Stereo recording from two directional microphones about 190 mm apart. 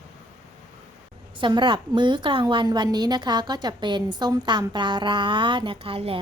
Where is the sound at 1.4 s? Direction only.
25° right (ahead or behind).